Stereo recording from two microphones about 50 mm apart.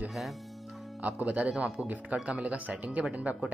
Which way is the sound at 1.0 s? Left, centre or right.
Right.